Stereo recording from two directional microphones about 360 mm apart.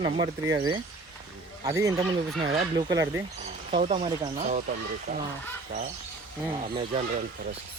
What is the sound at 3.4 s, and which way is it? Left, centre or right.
Speech, right.